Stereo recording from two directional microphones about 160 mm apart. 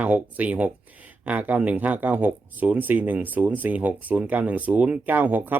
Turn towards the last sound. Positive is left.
turn(degrees=-10)  # may be behind; listen again after turning